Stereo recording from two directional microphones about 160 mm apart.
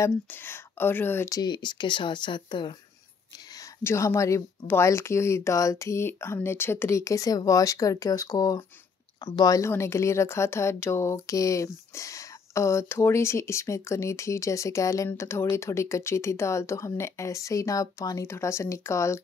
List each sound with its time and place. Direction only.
0.0 s speech: 15° left (ahead or behind); by 2.7 s 30° left (ahead or behind)
3.8 s speech: 15° left (ahead or behind)